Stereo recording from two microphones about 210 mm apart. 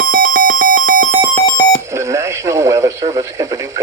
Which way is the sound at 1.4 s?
20° left (ahead or behind).